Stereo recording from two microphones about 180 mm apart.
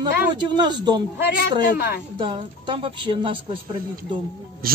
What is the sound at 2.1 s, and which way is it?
A woman's voice, 25° right (ahead or behind).